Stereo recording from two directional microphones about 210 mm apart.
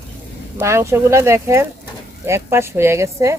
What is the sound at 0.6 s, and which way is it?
Speech, 15° right (ahead or behind).